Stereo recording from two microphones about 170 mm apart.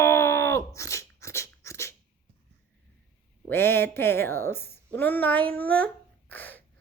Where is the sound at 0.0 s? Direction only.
15° left (ahead or behind).